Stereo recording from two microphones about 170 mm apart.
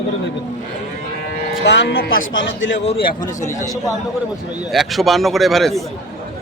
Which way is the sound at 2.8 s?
40° left (ahead or behind).